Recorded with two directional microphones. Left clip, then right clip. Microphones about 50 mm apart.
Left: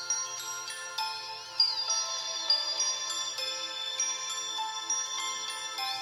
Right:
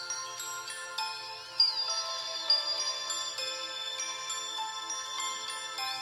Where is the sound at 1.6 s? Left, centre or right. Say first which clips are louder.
Even; right.